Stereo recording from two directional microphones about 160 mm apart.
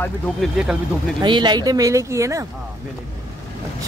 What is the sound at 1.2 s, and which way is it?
Speech, 30° right (ahead or behind).